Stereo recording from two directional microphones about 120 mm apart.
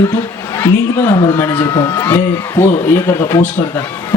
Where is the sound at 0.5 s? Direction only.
20° left (ahead or behind).